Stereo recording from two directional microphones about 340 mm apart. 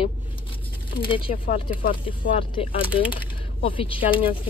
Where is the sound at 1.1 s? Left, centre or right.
Centre.